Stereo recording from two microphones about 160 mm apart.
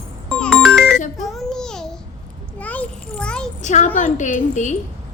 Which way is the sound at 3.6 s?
50° left (ahead or behind).